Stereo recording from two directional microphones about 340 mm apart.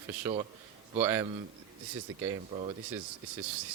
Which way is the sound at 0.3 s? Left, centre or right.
Centre.